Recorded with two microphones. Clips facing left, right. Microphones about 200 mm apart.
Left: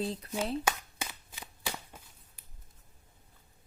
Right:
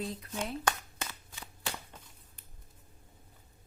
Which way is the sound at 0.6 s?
10° left (ahead or behind).